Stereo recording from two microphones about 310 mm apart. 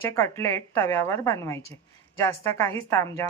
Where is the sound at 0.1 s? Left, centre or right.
Centre.